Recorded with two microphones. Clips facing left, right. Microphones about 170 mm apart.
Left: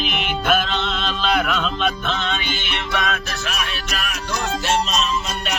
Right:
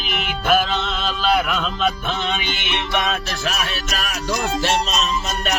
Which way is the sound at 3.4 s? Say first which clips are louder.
Right 3 dB; 40° right (ahead or behind).